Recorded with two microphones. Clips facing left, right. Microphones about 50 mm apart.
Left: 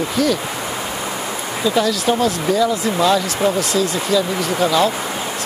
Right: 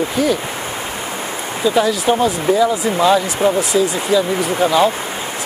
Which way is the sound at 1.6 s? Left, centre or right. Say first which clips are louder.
Right 2 dB; centre.